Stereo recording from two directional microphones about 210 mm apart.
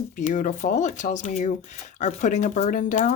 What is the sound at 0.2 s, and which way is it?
Speech, 35° left (ahead or behind).